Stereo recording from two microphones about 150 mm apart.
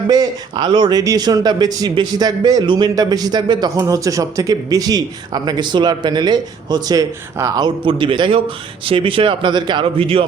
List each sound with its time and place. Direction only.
0.1 s speech: 25° right (ahead or behind)